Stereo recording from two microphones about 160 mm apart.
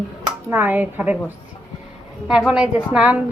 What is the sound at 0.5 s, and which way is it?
Speech, 10° right (ahead or behind).